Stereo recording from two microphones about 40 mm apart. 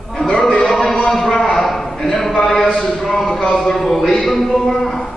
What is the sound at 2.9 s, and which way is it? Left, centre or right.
Speech, centre.